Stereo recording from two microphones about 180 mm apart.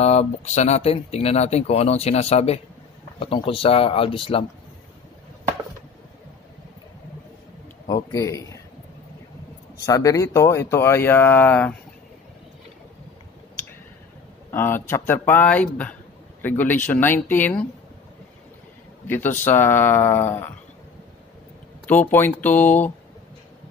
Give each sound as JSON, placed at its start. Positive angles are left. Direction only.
{"t": 0.0, "sound": "speech", "side_deg": 35}
{"t": 8.1, "sound": "speech", "side_deg": 15}
{"t": 9.8, "sound": "speech", "side_deg": 20}
{"t": 14.5, "sound": "speech", "side_deg": 15}
{"t": 19.0, "sound": "speech", "side_deg": 10}
{"t": 21.8, "sound": "speech", "side_deg": 10}